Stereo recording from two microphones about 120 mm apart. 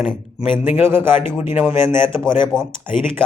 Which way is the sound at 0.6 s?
20° right (ahead or behind).